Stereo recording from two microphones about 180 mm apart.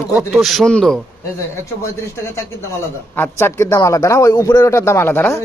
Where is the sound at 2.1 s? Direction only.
15° left (ahead or behind).